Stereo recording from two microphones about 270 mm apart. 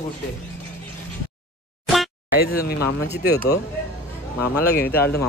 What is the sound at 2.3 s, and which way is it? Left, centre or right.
Speech, left.